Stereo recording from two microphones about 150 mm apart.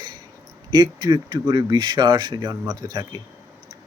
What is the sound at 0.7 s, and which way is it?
Speech, 25° right (ahead or behind).